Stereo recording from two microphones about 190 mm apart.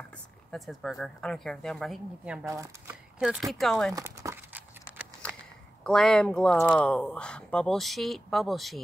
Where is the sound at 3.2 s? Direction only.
Centre (ahead or behind).